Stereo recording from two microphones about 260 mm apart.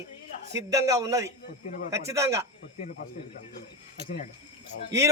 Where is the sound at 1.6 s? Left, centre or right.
Left.